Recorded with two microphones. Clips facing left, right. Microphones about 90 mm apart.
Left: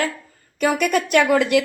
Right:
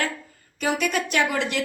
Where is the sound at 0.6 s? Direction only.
50° left (ahead or behind).